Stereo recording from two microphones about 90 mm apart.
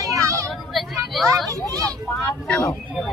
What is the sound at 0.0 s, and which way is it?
Vehicle, 35° right (ahead or behind).